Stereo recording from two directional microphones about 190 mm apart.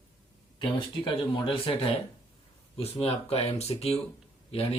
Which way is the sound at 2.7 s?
30° left (ahead or behind).